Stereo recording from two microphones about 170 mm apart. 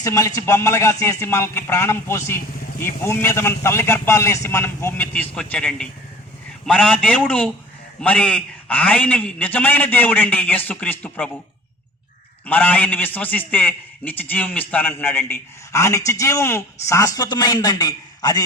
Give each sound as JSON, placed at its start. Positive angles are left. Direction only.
{"t": 0.0, "sound": "a man's voice", "side_deg": 20}
{"t": 12.5, "sound": "a man's voice", "side_deg": 10}